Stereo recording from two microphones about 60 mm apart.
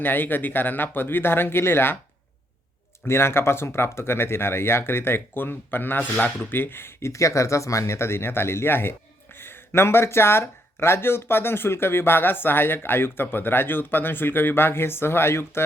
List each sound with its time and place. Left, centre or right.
0.0 s speech: left
3.0 s speech: left
7.1 s speech: left